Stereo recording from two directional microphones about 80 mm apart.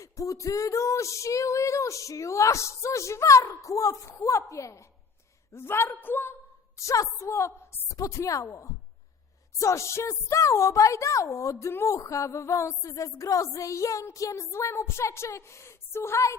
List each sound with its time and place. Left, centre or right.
0.0 s a woman's voice: left
6.7 s speech: left